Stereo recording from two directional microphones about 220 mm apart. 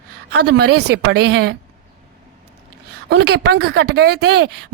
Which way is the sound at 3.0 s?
50° right (ahead or behind).